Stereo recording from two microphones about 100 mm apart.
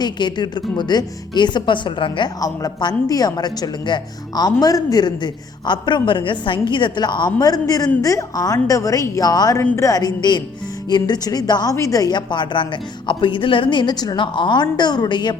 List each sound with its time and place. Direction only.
0.0 s a woman's voice: 50° left (ahead or behind)
2.4 s speech: 40° left (ahead or behind)
12.1 s a woman's voice: 50° left (ahead or behind)